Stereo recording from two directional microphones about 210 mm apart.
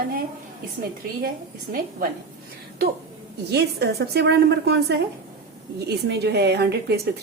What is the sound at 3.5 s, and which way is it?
Speech, 50° right (ahead or behind).